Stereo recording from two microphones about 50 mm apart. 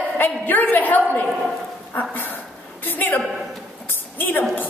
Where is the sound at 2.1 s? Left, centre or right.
Left.